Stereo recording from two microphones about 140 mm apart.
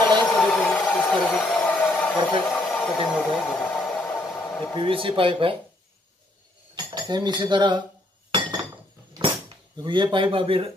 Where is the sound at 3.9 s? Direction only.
10° left (ahead or behind).